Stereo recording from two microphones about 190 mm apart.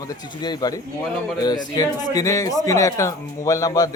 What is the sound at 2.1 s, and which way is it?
A man's voice, 15° left (ahead or behind).